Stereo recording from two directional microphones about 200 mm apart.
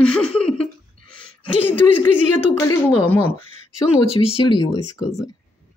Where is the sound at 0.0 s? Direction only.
5° left (ahead or behind).